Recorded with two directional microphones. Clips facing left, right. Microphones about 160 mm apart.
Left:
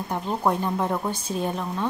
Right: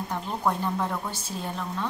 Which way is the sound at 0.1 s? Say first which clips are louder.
Left 4 dB; 20° left (ahead or behind).